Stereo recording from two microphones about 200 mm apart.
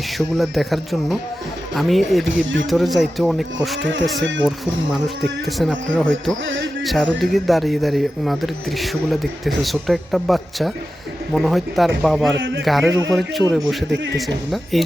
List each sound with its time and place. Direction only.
0.2 s speech: centre (ahead or behind)
2.2 s speech: 70° right (ahead or behind)
2.6 s speech: centre (ahead or behind)
12.4 s a sound: 70° right (ahead or behind)
12.6 s speech: centre (ahead or behind)
14.5 s speech: centre (ahead or behind)